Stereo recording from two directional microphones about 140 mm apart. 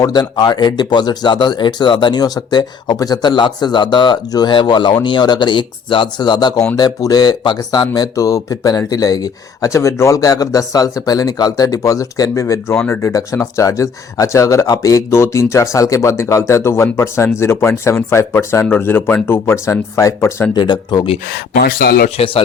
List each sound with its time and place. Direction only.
0.0 s speech: 30° left (ahead or behind)
21.2 s speech: 90° left
22.2 s speech: 40° left (ahead or behind)